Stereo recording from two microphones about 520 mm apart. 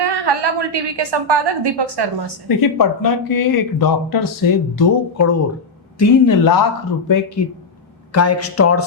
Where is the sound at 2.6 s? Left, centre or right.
Left.